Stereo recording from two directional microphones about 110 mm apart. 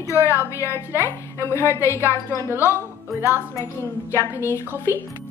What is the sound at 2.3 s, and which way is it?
Speech, 20° right (ahead or behind).